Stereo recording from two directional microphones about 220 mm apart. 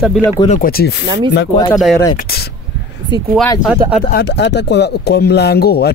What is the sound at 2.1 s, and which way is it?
Speech, 45° left (ahead or behind).